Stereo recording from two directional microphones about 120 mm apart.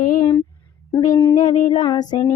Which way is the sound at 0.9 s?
30° left (ahead or behind).